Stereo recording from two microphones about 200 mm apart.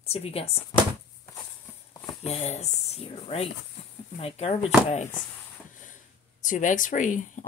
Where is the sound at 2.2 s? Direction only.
30° left (ahead or behind).